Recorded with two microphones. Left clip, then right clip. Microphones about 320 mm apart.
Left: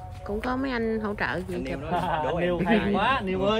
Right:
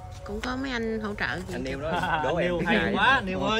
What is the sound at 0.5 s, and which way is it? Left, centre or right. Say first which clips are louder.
Speech: left 2 dB; centre.